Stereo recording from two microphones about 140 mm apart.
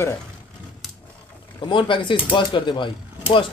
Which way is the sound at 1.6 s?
35° left (ahead or behind).